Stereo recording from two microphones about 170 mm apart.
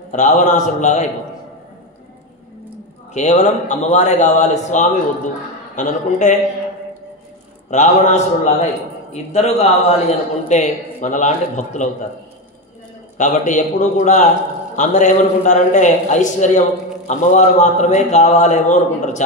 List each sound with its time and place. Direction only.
0.1 s a man's voice: 45° left (ahead or behind)
3.1 s a man's voice: 45° left (ahead or behind)
7.7 s a man's voice: 45° left (ahead or behind)
13.2 s a man's voice: 45° left (ahead or behind)